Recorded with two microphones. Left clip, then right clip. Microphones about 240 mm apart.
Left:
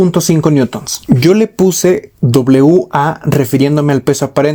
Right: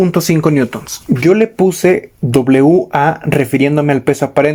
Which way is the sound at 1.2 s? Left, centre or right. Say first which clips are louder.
Even; left.